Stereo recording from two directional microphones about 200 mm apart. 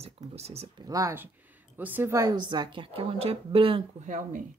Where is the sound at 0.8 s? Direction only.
15° right (ahead or behind).